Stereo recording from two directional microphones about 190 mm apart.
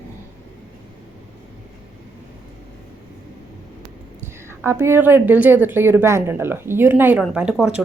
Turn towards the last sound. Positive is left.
turn(degrees=-5)  # may be behind; listen again after turning